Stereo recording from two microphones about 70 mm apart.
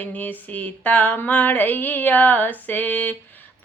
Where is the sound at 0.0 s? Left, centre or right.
Left.